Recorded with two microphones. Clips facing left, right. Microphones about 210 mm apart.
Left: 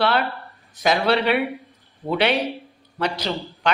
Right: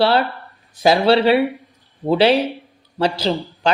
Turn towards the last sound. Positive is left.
turn(degrees=-30)  # may be behind; listen again after turning